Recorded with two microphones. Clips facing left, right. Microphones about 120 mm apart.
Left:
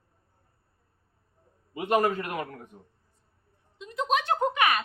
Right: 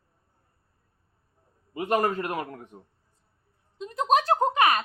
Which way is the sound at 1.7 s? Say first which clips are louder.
Even; 40° right (ahead or behind).